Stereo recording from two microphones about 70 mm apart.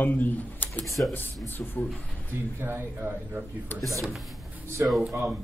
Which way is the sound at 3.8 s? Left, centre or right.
Centre.